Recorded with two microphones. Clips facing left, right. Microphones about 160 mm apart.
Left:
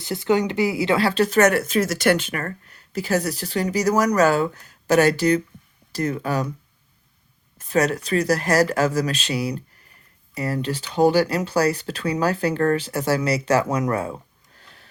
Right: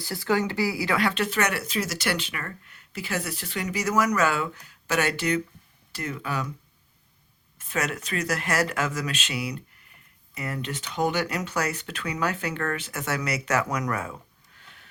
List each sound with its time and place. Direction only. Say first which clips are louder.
0.0 s speech: left 5 dB; 20° left (ahead or behind); by 6.5 s 40° left (ahead or behind)
7.7 s speech: left 9 dB; 35° left (ahead or behind)